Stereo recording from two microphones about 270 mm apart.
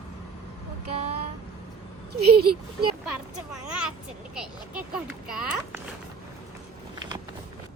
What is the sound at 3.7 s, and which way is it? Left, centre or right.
A child's voice, centre.